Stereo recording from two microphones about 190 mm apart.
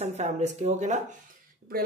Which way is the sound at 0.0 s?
35° right (ahead or behind).